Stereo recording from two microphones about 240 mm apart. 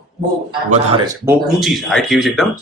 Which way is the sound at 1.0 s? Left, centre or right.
Centre.